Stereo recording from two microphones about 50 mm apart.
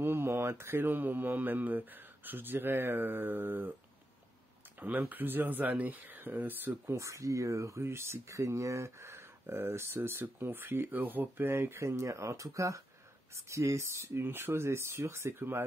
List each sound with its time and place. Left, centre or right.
0.0 s mantra: right
4.7 s mantra: right
6.9 s speech: right
7.8 s speech: right
10.4 s speech: right
12.0 s speech: right
13.3 s speech: right
14.0 s speech: right